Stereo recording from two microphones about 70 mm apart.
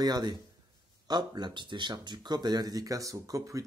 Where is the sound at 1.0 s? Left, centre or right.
Right.